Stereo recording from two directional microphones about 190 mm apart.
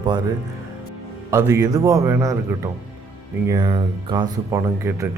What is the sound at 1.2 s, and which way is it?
A man's voice, 15° right (ahead or behind).